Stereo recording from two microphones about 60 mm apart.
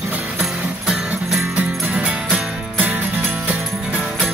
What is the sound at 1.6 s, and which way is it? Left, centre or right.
Music, right.